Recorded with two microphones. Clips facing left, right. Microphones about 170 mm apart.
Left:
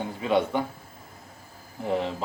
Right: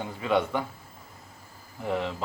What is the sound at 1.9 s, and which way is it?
Speech, 35° left (ahead or behind).